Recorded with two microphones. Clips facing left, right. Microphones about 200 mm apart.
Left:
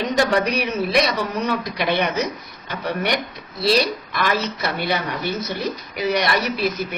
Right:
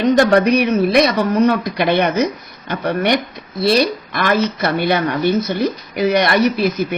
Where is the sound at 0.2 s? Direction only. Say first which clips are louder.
Right 7 dB; 55° right (ahead or behind).